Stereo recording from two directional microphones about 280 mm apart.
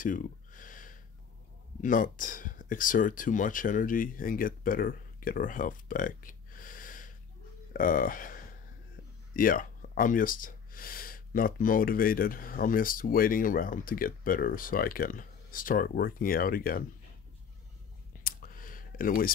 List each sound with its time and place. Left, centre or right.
0.0 s a sound: left
1.8 s speech: left
18.2 s clicking: left